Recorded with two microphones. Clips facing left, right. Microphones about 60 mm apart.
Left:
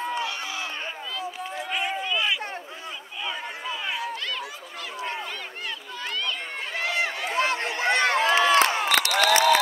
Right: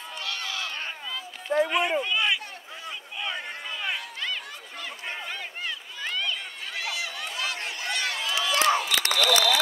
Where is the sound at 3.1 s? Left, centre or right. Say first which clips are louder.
Left 1 dB; centre.